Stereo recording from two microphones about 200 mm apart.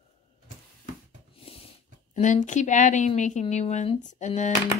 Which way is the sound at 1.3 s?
30° left (ahead or behind).